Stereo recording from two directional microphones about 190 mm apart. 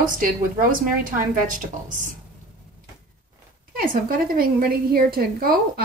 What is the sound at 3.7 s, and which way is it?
A woman's voice, 45° right (ahead or behind).